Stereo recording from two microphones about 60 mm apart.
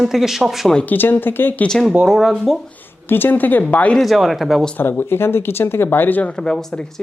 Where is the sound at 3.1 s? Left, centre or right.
Left.